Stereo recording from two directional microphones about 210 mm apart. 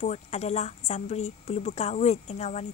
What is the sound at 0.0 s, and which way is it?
A woman's voice, 35° left (ahead or behind).